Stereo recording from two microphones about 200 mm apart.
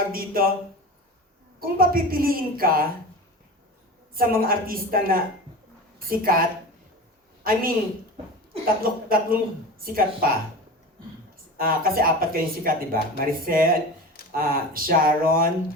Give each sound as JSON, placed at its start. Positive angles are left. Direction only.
{"t": 0.0, "sound": "speech", "side_deg": -45}
{"t": 1.5, "sound": "speech", "side_deg": -45}
{"t": 4.1, "sound": "speech", "side_deg": -45}
{"t": 7.4, "sound": "speech", "side_deg": -45}
{"t": 8.8, "sound": "speech", "side_deg": -45}
{"t": 11.5, "sound": "speech", "side_deg": -45}